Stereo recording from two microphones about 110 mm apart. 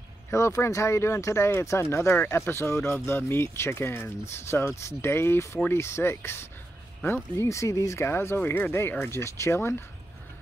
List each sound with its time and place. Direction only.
0.3 s speech: 25° left (ahead or behind)